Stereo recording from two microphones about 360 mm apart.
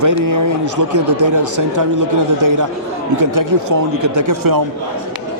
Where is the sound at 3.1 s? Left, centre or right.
Right.